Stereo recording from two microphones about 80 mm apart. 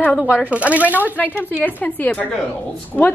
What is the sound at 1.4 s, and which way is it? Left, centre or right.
A woman's voice, left.